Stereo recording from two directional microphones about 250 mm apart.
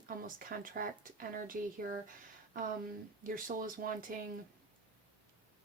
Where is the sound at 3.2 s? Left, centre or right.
Right.